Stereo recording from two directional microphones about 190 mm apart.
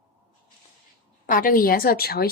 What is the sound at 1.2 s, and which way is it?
A woman's voice, 45° left (ahead or behind).